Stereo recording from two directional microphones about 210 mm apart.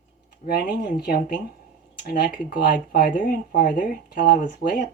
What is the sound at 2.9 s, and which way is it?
Speech, 45° left (ahead or behind).